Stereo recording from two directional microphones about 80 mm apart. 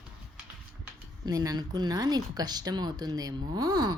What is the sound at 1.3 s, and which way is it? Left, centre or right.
A woman's voice, right.